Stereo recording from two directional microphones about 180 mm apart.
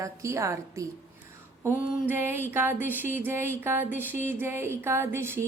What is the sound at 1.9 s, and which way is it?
Speech, 10° right (ahead or behind).